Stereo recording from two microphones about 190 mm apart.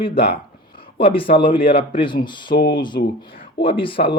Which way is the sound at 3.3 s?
50° left (ahead or behind).